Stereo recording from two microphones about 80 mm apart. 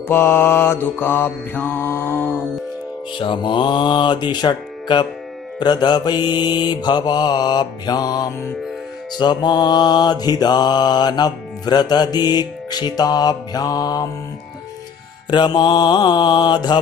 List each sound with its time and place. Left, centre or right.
0.1 s mantra: left
3.2 s music: left
5.6 s mantra: left
9.2 s mantra: left
15.2 s music: left